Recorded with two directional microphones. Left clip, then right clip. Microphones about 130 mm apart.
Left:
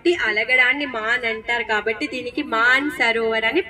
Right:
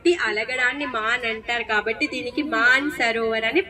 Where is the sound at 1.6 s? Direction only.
50° left (ahead or behind).